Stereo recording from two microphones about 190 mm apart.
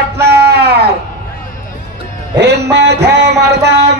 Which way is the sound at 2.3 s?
65° right (ahead or behind).